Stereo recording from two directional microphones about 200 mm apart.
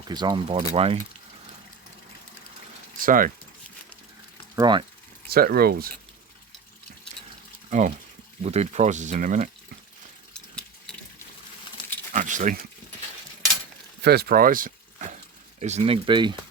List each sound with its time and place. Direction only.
0.1 s speech: 20° right (ahead or behind)
3.0 s speech: 45° right (ahead or behind)
4.5 s speech: 20° right (ahead or behind)
5.3 s speech: 50° right (ahead or behind)
7.7 s speech: 35° right (ahead or behind)
12.1 s a sound: 40° right (ahead or behind)
14.0 s speech: 55° right (ahead or behind)
15.6 s speech: 30° right (ahead or behind)